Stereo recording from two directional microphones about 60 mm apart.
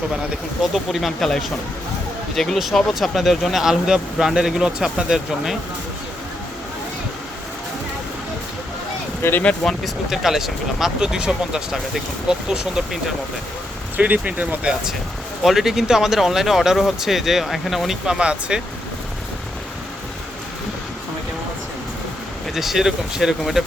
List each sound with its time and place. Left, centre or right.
0.7 s speech: centre
9.2 s speech: left
9.6 s speech: centre
13.9 s speech: right
15.4 s speech: centre
18.0 s speech: centre
22.5 s speech: centre